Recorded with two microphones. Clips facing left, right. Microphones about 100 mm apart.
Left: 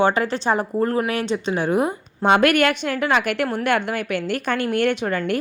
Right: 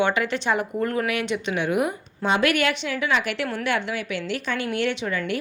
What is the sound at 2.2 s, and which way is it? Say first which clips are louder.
A woman's voice: left 5 dB; 55° left (ahead or behind).